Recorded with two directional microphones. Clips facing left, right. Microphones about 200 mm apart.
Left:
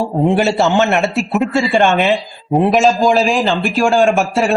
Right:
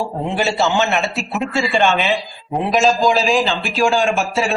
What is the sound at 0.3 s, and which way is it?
Speech, 55° left (ahead or behind).